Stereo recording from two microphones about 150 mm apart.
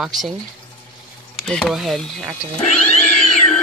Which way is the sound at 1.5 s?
5° left (ahead or behind).